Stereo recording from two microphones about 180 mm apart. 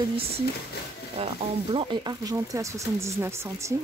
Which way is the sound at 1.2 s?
30° right (ahead or behind).